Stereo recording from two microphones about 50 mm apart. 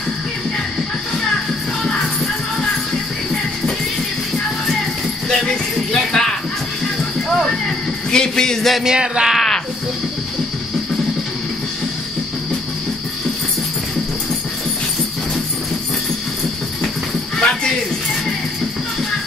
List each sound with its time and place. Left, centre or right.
5.3 s jingle bell: centre
6.2 s music: centre
8.1 s speech: centre
8.8 s speech: centre
9.3 s speech: centre
17.4 s a sound: centre